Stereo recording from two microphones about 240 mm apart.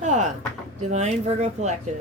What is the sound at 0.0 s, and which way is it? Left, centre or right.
Door, right.